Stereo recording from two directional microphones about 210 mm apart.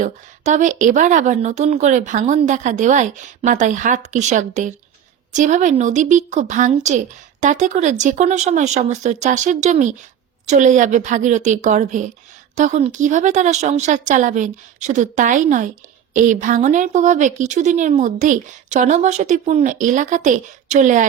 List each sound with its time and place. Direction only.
0.0 s speech: 35° right (ahead or behind)